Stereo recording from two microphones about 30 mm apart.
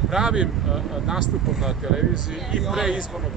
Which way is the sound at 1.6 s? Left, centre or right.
Centre.